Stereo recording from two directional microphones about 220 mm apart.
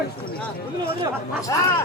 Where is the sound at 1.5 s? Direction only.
15° left (ahead or behind).